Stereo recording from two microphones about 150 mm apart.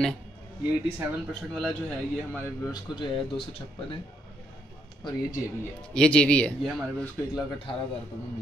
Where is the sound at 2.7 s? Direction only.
30° left (ahead or behind).